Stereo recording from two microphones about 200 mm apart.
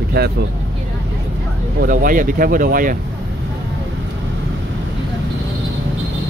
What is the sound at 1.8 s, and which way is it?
Speech, 40° right (ahead or behind).